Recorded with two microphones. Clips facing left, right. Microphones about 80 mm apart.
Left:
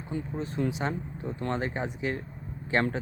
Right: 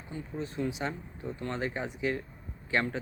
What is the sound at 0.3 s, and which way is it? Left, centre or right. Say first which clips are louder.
Speech: left 2 dB; left.